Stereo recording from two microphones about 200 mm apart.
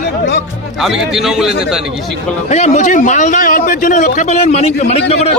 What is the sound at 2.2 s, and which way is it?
A man's voice, 35° left (ahead or behind).